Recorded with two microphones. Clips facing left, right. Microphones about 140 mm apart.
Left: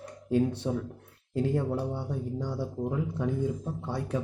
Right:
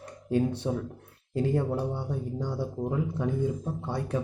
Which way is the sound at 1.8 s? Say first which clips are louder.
Right 1 dB; 25° right (ahead or behind).